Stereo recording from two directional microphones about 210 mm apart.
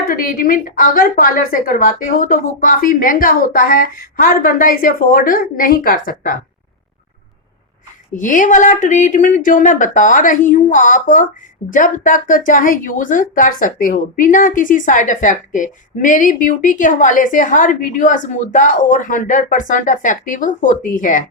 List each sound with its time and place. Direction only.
0.1 s speech: 40° left (ahead or behind)
8.1 s speech: 40° left (ahead or behind)